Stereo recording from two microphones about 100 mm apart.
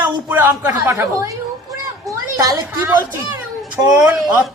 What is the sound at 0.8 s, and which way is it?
Speech, 30° right (ahead or behind).